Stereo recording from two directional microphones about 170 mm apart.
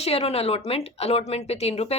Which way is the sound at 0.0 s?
35° left (ahead or behind).